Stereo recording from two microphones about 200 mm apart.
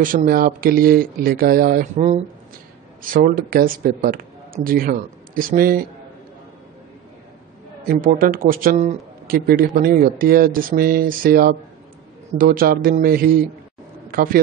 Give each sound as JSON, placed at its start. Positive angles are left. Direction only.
{"t": 0.0, "sound": "speech", "side_deg": -45}
{"t": 7.9, "sound": "speech", "side_deg": -45}